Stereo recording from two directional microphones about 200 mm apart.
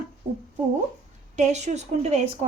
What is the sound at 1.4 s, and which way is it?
Speech, 35° right (ahead or behind).